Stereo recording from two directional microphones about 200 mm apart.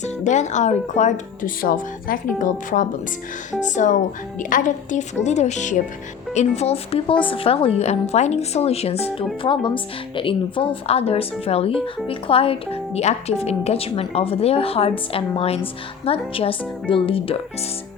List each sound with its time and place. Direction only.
0.0 s speech: 35° left (ahead or behind)